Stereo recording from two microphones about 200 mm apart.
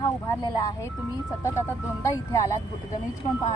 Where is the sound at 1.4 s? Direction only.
15° left (ahead or behind).